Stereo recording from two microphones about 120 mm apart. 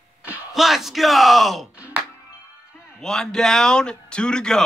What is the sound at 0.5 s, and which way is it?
Speech, centre (ahead or behind).